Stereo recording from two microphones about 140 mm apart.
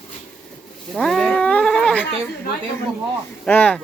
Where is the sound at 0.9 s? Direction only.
5° left (ahead or behind).